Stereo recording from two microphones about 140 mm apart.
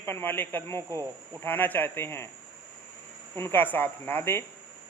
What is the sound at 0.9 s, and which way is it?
Speech, 25° right (ahead or behind).